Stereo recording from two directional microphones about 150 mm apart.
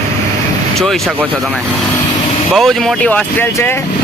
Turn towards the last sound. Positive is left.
turn(degrees=15)  # may be behind; listen again after turning